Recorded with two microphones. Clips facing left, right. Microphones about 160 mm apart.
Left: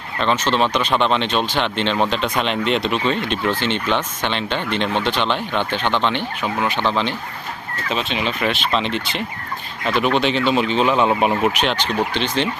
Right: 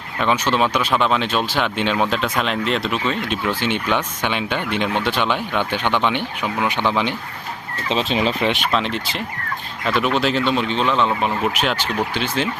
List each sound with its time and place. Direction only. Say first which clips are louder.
0.2 s speech: even; 10° right (ahead or behind)
7.9 s speech: right 3 dB; 35° right (ahead or behind)
8.7 s speech: even; centre (ahead or behind)
11.1 s speech: left 4 dB; 20° left (ahead or behind)
11.4 s speech: left 2 dB; centre (ahead or behind)